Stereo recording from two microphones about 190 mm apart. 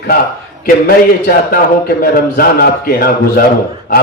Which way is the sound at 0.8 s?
50° left (ahead or behind).